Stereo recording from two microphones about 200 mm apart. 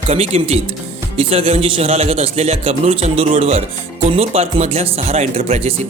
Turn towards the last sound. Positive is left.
turn(degrees=-35)  # may be behind; listen again after turning